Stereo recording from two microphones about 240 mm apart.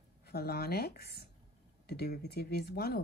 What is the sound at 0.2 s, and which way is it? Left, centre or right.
Speech, left.